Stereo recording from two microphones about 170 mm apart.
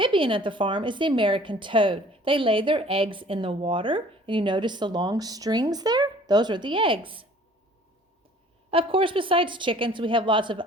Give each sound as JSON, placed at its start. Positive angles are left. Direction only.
{"t": 0.0, "sound": "a woman's voice", "side_deg": -30}
{"t": 8.7, "sound": "a woman's voice", "side_deg": -30}